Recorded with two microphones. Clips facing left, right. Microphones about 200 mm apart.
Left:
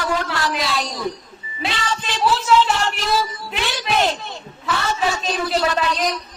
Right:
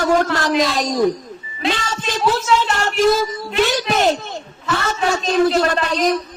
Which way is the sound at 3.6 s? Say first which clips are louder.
Right 4 dB; 45° right (ahead or behind).